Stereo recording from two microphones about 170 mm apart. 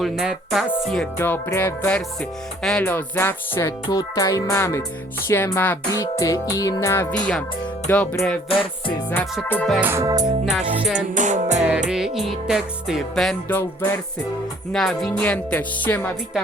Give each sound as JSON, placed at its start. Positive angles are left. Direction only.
{"t": 0.0, "sound": "music", "side_deg": 0}
{"t": 7.1, "sound": "music", "side_deg": 5}
{"t": 8.4, "sound": "music", "side_deg": 30}
{"t": 9.5, "sound": "music", "side_deg": 5}
{"t": 9.8, "sound": "music", "side_deg": -15}
{"t": 11.1, "sound": "music", "side_deg": -45}
{"t": 11.9, "sound": "music", "side_deg": -5}
{"t": 13.5, "sound": "music", "side_deg": 10}